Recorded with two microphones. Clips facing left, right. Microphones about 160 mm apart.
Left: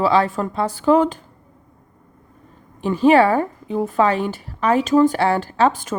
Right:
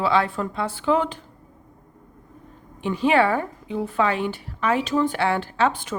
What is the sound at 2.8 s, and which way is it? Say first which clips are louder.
A woman's voice: left 6 dB; 40° left (ahead or behind).